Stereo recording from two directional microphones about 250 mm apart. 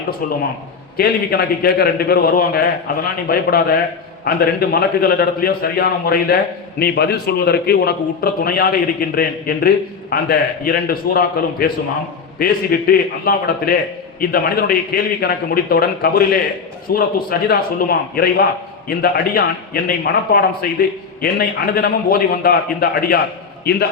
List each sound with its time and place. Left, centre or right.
0.9 s a man's voice: left